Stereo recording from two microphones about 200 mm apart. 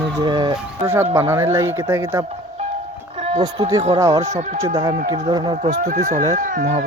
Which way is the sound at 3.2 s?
30° right (ahead or behind).